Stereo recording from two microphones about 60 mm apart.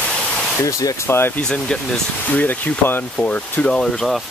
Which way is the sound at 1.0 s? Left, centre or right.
Left.